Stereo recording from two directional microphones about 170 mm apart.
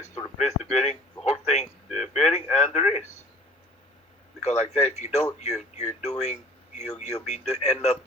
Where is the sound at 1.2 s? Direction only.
40° left (ahead or behind).